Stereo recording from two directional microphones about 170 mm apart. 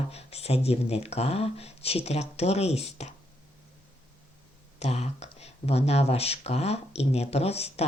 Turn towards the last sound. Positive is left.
turn(degrees=35)  # may be behind; listen again after turning